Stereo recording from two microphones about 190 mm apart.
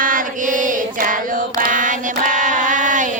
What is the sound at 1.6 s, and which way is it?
Female singing, 45° right (ahead or behind).